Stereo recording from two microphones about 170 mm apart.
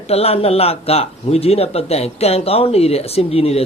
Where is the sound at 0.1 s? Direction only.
35° left (ahead or behind).